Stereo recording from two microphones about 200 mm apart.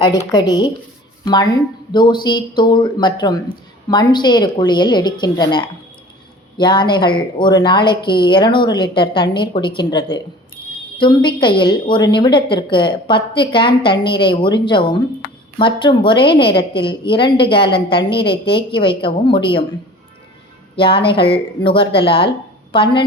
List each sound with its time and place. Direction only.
0.0 s a woman's voice: 20° left (ahead or behind)
20.7 s a woman's voice: 25° left (ahead or behind)